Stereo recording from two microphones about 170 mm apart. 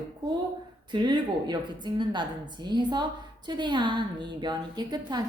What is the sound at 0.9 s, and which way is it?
A woman's voice, 25° right (ahead or behind).